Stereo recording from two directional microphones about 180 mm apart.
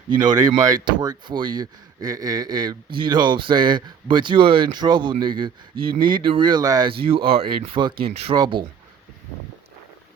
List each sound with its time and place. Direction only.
0.1 s speech: 25° right (ahead or behind)